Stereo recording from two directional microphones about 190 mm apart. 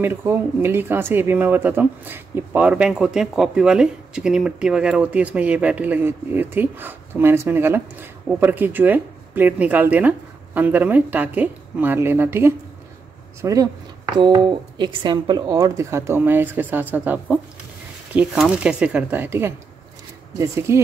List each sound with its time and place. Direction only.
0.0 s speech: 10° right (ahead or behind)